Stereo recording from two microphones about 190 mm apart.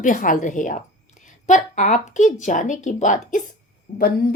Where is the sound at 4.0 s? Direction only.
50° left (ahead or behind).